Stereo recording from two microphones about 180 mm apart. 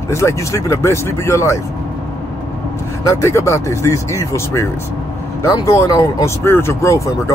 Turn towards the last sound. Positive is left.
turn(degrees=15)  # may be behind; listen again after turning